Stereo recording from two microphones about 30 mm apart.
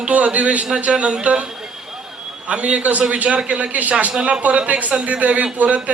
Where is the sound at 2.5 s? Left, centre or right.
Right.